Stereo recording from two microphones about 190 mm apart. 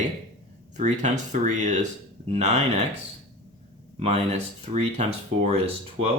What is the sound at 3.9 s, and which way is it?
Speech, 35° right (ahead or behind).